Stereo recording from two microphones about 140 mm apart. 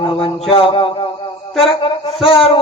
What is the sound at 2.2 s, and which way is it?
Speech, 40° left (ahead or behind).